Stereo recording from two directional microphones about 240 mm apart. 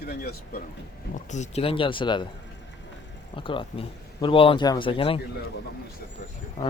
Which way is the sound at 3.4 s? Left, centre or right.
Left.